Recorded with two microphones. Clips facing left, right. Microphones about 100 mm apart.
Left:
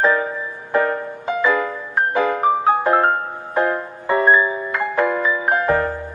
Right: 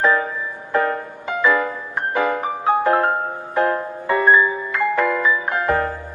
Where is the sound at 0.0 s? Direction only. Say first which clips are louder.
Even; 30° left (ahead or behind).